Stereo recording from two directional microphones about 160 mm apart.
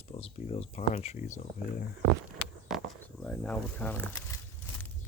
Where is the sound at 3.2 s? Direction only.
10° left (ahead or behind).